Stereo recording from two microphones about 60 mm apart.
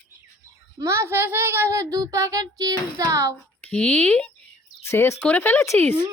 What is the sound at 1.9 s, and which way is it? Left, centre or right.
Speech, right.